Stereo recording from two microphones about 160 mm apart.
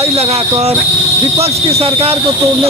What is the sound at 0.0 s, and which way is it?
Speech, 40° right (ahead or behind).